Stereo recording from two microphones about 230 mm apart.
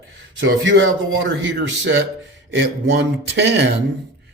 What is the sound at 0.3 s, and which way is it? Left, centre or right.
A man's voice, right.